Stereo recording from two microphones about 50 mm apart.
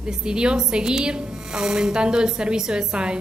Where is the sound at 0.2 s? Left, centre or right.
Centre.